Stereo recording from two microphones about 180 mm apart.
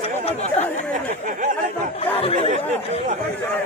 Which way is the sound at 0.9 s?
45° right (ahead or behind).